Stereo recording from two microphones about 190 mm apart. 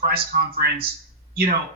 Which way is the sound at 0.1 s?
55° right (ahead or behind).